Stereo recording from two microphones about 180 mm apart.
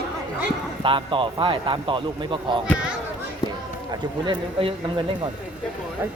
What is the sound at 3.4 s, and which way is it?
Run, 20° left (ahead or behind).